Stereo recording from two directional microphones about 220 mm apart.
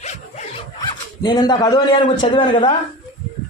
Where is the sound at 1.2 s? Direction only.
20° left (ahead or behind).